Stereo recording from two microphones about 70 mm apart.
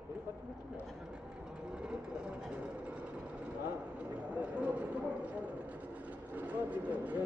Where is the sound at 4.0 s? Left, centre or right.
Centre.